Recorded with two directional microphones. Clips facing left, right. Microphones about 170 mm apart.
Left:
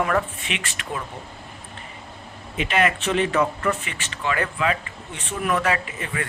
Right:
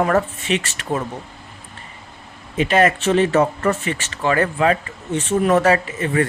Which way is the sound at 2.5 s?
40° right (ahead or behind).